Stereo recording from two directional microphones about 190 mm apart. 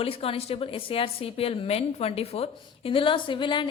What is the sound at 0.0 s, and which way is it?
A woman's voice, 30° left (ahead or behind).